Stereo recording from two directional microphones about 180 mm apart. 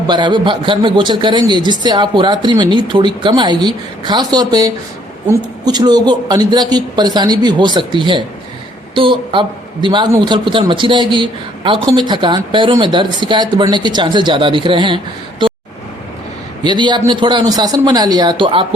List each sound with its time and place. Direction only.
0.1 s a man's voice: 25° right (ahead or behind)
16.6 s a man's voice: 25° right (ahead or behind)